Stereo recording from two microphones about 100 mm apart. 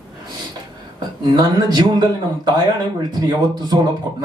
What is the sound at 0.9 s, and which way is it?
Speech, 45° right (ahead or behind).